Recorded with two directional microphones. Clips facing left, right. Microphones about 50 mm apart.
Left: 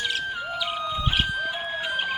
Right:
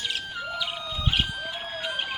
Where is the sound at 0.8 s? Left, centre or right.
Left.